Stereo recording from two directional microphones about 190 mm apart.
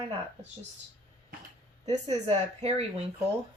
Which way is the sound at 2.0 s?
35° right (ahead or behind).